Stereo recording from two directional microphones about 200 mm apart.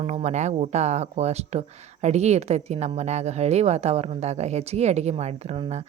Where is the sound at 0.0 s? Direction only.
30° right (ahead or behind).